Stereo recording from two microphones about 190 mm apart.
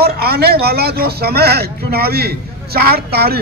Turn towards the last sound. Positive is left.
turn(degrees=-55)  # may be behind; listen again after turning